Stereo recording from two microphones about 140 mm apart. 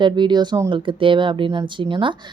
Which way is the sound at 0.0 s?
30° right (ahead or behind).